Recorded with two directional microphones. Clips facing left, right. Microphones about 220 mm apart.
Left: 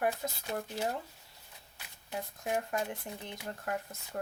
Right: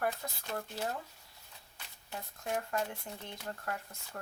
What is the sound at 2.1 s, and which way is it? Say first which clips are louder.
Speech: left 3 dB; 15° left (ahead or behind).